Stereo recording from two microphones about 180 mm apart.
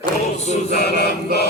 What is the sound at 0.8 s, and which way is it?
Chant, 65° left (ahead or behind).